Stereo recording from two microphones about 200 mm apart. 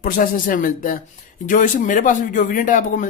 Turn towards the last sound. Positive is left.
turn(degrees=40)  # may be behind; listen again after turning